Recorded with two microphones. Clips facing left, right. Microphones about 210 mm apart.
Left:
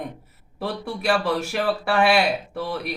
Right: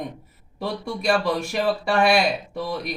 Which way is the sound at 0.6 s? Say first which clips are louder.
Even; 5° left (ahead or behind).